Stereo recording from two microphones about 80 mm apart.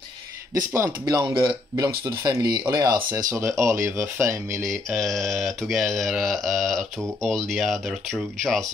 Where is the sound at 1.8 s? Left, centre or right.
Right.